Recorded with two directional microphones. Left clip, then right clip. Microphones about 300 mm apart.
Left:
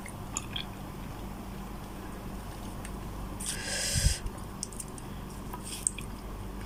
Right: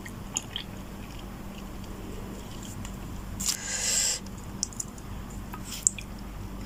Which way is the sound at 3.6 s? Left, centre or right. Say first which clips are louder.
Right 2 dB; centre.